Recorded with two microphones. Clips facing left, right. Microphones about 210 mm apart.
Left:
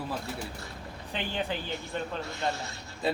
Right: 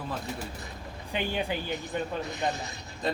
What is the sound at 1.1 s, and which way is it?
Speech, 10° right (ahead or behind).